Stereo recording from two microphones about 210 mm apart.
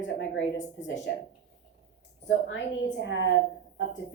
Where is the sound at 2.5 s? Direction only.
60° left (ahead or behind).